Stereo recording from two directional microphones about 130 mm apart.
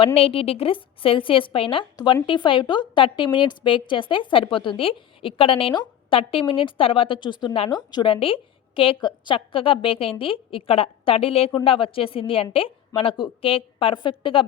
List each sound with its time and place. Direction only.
0.0 s a woman's voice: 45° left (ahead or behind)